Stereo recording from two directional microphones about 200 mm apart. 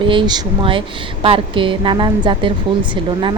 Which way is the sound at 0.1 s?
20° right (ahead or behind).